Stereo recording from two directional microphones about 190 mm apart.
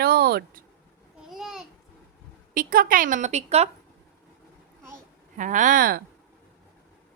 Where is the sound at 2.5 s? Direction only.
45° right (ahead or behind).